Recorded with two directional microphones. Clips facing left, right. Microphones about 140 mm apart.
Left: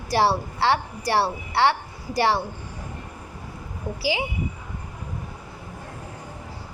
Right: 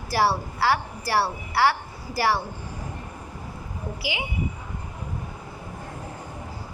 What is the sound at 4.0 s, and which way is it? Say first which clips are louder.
Speech: left 7 dB; 30° left (ahead or behind).